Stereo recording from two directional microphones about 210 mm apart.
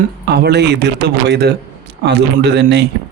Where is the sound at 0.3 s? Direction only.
50° right (ahead or behind).